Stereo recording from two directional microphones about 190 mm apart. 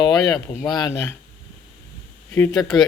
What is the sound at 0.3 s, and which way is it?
Speech, 20° left (ahead or behind).